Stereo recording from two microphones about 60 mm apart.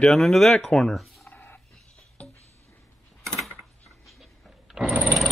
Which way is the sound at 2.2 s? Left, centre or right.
Centre.